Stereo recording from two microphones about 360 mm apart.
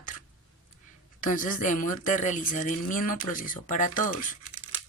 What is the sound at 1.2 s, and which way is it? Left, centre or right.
Speech, left.